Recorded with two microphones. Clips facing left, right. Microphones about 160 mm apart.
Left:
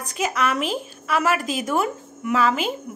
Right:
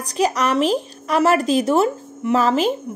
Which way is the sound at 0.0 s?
35° right (ahead or behind).